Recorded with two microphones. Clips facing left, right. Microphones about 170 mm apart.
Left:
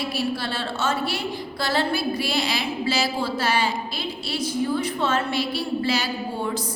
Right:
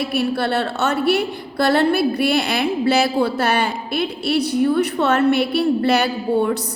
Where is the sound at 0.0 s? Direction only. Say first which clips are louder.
Right 6 dB; 60° right (ahead or behind).